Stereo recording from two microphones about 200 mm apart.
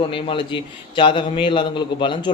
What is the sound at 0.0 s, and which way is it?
A man's voice, 25° left (ahead or behind).